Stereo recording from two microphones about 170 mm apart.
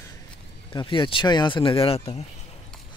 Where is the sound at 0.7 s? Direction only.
30° left (ahead or behind).